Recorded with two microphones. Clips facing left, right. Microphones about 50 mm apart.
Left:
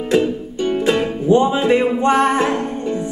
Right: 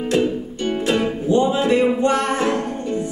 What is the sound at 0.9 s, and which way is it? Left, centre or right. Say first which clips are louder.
Music: left 2 dB; left.